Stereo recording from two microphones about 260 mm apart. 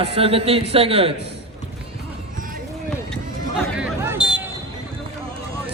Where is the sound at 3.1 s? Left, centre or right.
Centre.